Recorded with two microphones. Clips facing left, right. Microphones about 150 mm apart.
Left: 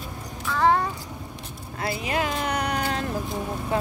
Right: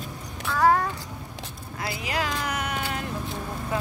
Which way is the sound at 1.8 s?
25° left (ahead or behind).